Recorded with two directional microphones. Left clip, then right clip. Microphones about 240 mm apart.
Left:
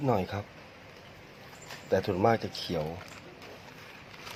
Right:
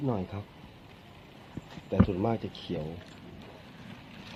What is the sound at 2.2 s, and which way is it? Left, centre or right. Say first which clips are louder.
Speech: left 6 dB; left.